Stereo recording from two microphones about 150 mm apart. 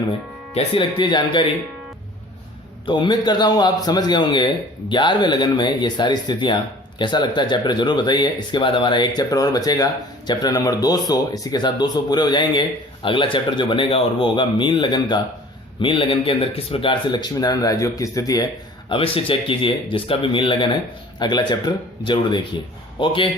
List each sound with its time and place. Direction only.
0.5 s speech: 35° left (ahead or behind)
2.8 s speech: 30° left (ahead or behind)
18.9 s speech: 35° left (ahead or behind)